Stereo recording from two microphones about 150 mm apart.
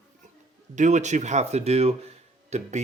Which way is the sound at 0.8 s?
50° right (ahead or behind).